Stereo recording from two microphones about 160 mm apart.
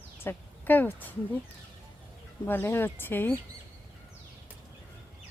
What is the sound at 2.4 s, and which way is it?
Speech, 15° left (ahead or behind).